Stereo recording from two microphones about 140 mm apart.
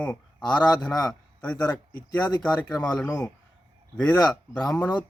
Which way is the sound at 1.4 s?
10° left (ahead or behind).